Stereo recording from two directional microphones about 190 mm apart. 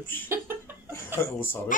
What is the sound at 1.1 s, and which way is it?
Speech, 10° left (ahead or behind).